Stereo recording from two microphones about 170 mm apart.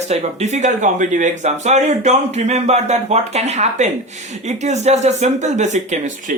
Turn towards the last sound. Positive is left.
turn(degrees=-45)  # may be behind; listen again after turning